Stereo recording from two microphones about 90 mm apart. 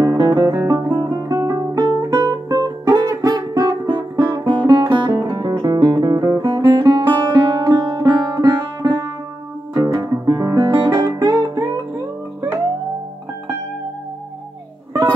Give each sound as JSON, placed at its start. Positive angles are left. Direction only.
{"t": 0.0, "sound": "music", "side_deg": -45}
{"t": 4.5, "sound": "music", "side_deg": -60}
{"t": 8.8, "sound": "music", "side_deg": -30}
{"t": 9.8, "sound": "guitar", "side_deg": -45}
{"t": 10.7, "sound": "music", "side_deg": -55}
{"t": 11.1, "sound": "music", "side_deg": -40}